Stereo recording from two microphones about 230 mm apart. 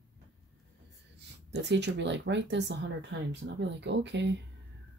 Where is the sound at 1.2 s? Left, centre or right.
Right.